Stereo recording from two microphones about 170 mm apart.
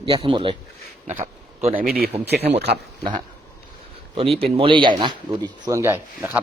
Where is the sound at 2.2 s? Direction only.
75° right (ahead or behind).